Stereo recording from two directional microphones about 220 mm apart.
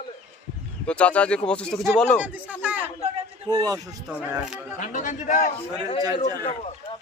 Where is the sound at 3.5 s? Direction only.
15° right (ahead or behind).